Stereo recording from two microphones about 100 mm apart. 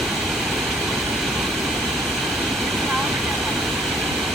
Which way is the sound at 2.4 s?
Centre (ahead or behind).